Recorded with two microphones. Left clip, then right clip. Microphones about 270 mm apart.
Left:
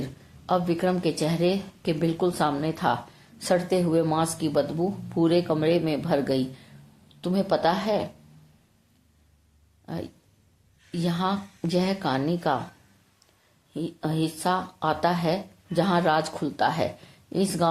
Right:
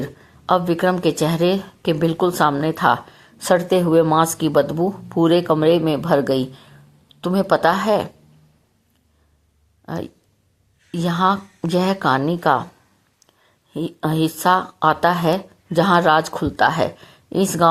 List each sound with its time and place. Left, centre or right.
0.4 s speech: right
9.8 s speech: right
13.7 s speech: right